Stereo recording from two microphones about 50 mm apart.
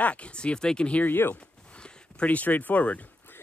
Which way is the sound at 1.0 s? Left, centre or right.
Left.